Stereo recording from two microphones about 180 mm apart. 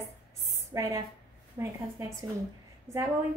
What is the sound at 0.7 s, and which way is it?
Speech, 15° right (ahead or behind).